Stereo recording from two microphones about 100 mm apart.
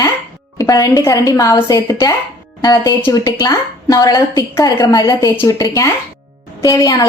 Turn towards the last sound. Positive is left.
turn(degrees=35)  # may be behind; listen again after turning